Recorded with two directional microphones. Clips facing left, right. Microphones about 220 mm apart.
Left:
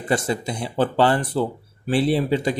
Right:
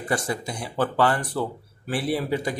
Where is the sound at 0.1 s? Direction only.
25° left (ahead or behind).